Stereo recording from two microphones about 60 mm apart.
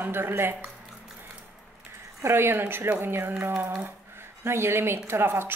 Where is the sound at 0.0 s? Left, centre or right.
Right.